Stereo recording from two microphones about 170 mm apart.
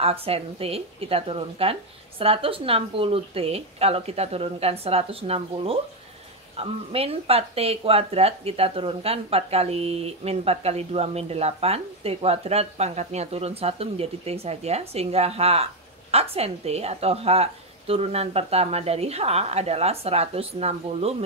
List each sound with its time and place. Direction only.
0.0 s speech: 35° right (ahead or behind)